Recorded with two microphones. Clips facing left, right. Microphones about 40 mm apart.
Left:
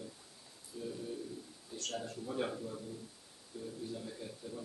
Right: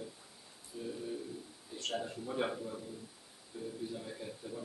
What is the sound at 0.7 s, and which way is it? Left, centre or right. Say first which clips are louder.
Speech: right 1 dB; centre.